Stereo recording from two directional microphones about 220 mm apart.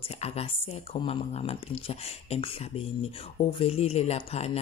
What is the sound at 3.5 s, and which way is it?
Speech, 25° left (ahead or behind).